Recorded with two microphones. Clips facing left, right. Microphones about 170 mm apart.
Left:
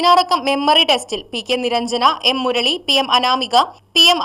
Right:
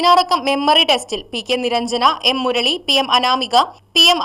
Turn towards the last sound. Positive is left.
turn(degrees=0)  # may be behind; listen again after turning